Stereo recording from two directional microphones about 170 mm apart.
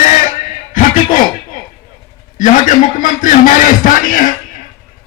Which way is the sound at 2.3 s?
50° left (ahead or behind).